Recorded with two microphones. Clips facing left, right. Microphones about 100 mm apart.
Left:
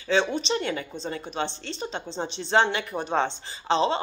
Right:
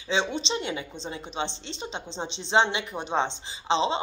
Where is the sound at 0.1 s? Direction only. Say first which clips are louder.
Left 3 dB; 20° right (ahead or behind).